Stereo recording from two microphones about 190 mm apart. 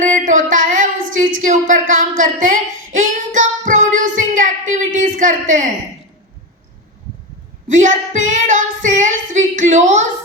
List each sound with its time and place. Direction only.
0.0 s a sound: 40° right (ahead or behind)
4.9 s a woman's voice: 45° right (ahead or behind)
7.7 s female singing: 40° right (ahead or behind)